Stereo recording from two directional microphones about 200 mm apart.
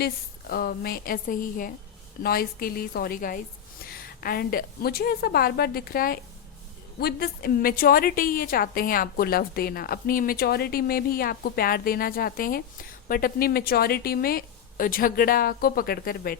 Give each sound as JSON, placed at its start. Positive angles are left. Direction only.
{"t": 0.0, "sound": "a woman's voice", "side_deg": 50}